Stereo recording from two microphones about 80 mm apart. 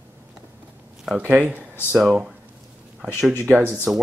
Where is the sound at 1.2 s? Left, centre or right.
Centre.